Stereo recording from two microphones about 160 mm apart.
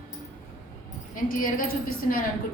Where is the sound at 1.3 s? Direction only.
60° left (ahead or behind).